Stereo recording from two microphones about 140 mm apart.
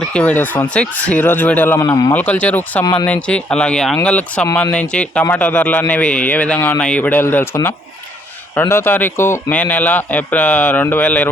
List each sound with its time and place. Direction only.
0.1 s speech: 10° left (ahead or behind)
2.8 s speech: 30° left (ahead or behind)
3.1 s speech: 10° left (ahead or behind)